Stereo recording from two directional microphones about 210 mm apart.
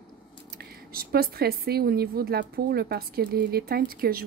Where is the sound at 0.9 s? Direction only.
45° right (ahead or behind).